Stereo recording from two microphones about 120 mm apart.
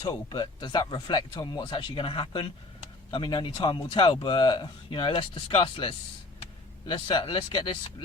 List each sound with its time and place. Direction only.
0.0 s speech: 40° left (ahead or behind)